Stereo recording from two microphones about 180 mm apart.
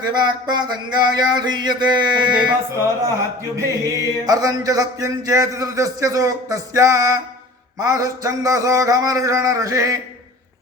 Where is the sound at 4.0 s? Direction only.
20° right (ahead or behind).